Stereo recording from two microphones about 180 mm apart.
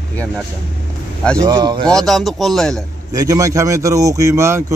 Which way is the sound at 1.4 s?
25° right (ahead or behind).